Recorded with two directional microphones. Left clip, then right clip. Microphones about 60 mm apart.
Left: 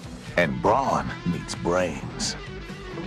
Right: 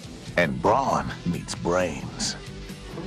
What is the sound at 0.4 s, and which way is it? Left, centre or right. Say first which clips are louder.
A woman's voice: even; centre.